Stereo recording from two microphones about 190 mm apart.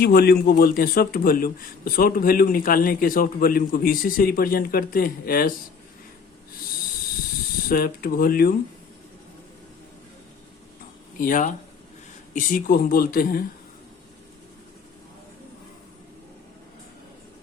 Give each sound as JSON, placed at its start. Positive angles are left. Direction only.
{"t": 0.0, "sound": "a man's voice", "side_deg": 55}
{"t": 7.7, "sound": "a man's voice", "side_deg": 50}
{"t": 11.2, "sound": "a man's voice", "side_deg": 45}